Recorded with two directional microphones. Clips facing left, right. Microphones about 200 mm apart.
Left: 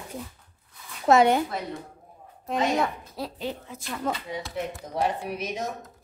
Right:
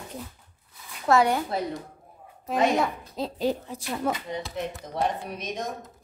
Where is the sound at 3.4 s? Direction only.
40° right (ahead or behind).